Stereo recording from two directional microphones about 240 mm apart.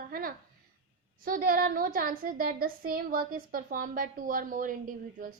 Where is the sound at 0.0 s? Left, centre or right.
Right.